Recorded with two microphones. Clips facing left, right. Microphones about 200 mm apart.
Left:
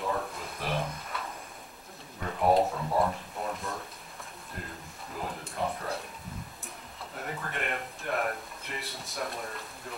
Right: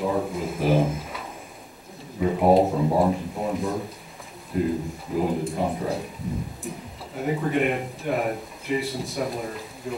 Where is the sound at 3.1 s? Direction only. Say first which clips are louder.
Right 9 dB; 5° right (ahead or behind).